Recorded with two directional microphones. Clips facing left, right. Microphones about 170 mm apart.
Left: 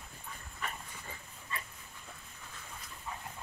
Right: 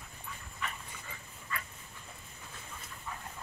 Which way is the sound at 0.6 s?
40° left (ahead or behind).